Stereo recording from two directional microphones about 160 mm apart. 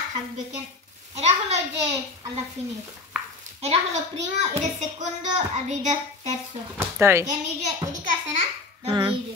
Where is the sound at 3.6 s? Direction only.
45° right (ahead or behind).